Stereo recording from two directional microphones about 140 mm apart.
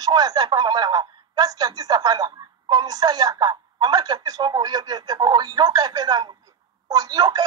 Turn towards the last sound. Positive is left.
turn(degrees=-30)  # may be behind; listen again after turning